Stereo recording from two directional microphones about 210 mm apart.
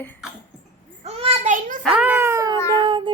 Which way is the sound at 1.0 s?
30° right (ahead or behind).